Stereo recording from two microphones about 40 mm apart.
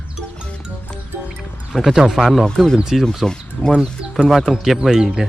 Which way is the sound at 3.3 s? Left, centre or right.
Centre.